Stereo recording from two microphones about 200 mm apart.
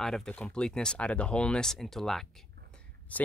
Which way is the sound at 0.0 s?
5° left (ahead or behind).